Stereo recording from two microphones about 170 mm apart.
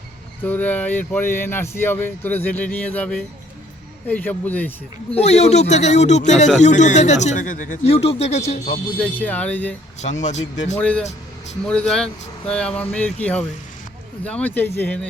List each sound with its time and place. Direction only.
0.4 s speech: 10° left (ahead or behind)
5.1 s speech: 40° left (ahead or behind)
9.0 s speech: 10° left (ahead or behind)
10.0 s speech: 45° left (ahead or behind)
10.8 s speech: 5° left (ahead or behind)
14.3 s speech: 10° left (ahead or behind)